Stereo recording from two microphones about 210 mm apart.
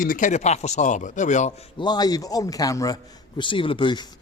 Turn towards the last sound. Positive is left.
turn(degrees=20)  # may be behind; listen again after turning